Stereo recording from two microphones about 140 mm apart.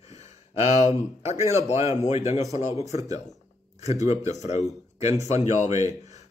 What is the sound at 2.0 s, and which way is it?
Speech, 50° left (ahead or behind).